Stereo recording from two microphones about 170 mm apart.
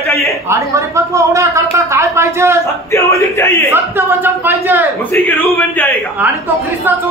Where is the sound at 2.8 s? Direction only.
15° left (ahead or behind).